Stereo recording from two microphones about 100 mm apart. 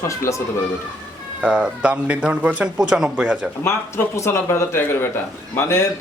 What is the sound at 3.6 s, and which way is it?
Speech, 25° left (ahead or behind).